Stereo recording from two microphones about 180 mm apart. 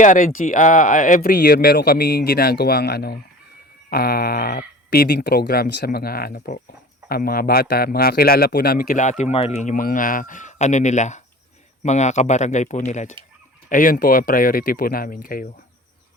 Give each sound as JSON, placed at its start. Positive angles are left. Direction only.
{"t": 0.0, "sound": "speech", "side_deg": 45}